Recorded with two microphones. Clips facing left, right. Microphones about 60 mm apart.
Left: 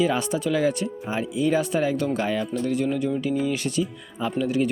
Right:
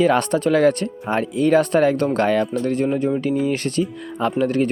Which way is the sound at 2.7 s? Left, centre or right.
Right.